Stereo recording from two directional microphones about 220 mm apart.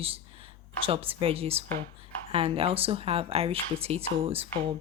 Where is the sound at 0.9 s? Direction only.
25° right (ahead or behind).